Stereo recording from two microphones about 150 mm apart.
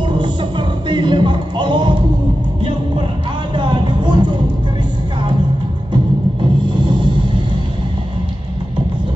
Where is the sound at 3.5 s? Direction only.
30° right (ahead or behind).